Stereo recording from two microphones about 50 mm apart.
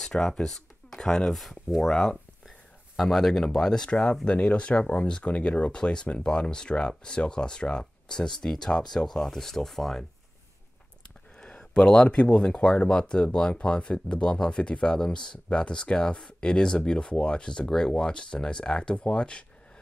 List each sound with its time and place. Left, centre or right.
0.0 s speech: centre
11.3 s speech: centre